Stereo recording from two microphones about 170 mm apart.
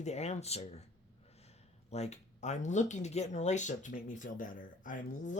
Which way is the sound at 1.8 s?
40° left (ahead or behind).